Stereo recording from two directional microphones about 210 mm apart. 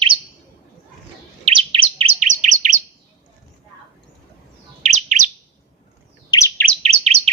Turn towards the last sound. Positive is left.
turn(degrees=-30)  # may be behind; listen again after turning